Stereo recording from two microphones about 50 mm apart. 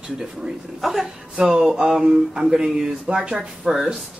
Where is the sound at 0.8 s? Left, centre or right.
Centre.